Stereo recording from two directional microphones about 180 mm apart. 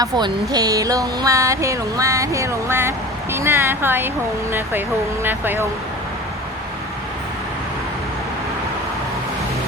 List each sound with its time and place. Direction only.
0.0 s speech: 20° right (ahead or behind)
5.2 s speech: 10° right (ahead or behind)